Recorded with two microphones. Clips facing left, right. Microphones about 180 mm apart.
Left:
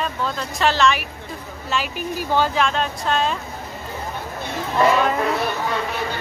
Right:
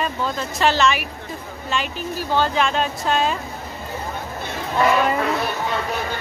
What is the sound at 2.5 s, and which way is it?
Speech, centre (ahead or behind).